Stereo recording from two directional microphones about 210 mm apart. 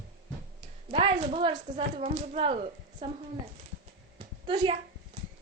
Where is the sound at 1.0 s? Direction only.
30° right (ahead or behind).